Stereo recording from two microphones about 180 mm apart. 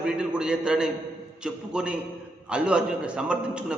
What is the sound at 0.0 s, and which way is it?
A man's voice, 5° right (ahead or behind).